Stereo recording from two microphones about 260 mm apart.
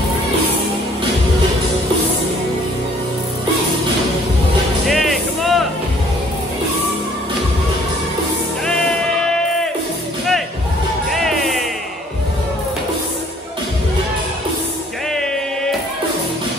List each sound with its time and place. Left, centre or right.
4.8 s music: centre
11.1 s music: centre